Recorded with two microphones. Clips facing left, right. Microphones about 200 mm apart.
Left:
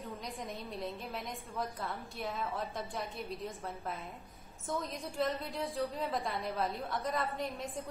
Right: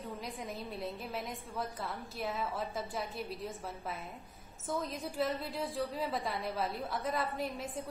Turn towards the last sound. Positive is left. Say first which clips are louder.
# right 1 dB
turn(degrees=-5)  # may be behind; listen again after turning